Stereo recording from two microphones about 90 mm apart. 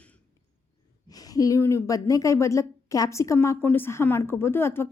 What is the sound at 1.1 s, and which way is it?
A woman's voice, 45° left (ahead or behind).